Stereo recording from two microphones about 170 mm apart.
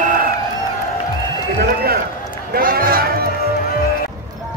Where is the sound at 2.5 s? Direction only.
60° right (ahead or behind).